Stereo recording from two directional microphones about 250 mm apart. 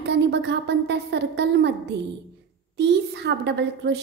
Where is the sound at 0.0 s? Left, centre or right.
Right.